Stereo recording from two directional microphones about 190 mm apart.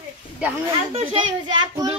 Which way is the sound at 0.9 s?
30° right (ahead or behind).